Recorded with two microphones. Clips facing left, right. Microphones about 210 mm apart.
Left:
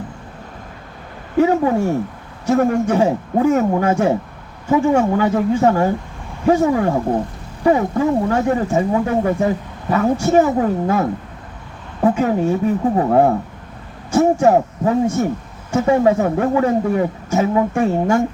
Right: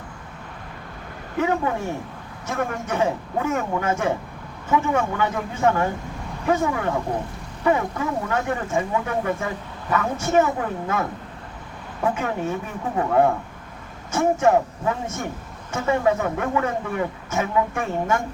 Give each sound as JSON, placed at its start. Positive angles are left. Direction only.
{"t": 1.4, "sound": "speech", "side_deg": 35}
{"t": 12.1, "sound": "speech", "side_deg": 35}